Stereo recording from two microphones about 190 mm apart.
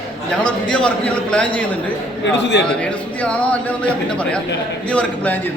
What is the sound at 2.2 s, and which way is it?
Speech, 70° left (ahead or behind).